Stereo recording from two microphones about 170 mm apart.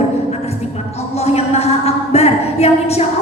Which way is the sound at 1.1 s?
40° left (ahead or behind).